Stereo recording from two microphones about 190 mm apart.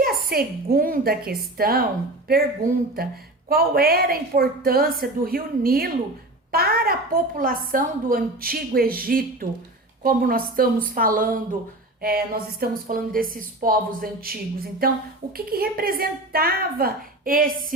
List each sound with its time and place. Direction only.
0.0 s a woman's voice: 55° right (ahead or behind)
3.5 s a woman's voice: 55° right (ahead or behind)